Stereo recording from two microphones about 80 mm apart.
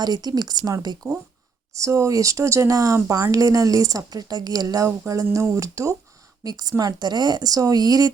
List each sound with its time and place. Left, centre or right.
0.0 s speech: right
1.0 s speech: right
6.4 s speech: right